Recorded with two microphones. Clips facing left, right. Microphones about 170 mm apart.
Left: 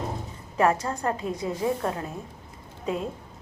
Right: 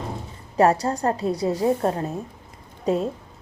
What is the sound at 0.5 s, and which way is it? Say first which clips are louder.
A woman's voice: right 5 dB; 35° right (ahead or behind).